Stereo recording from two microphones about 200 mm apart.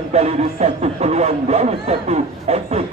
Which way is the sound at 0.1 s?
30° right (ahead or behind).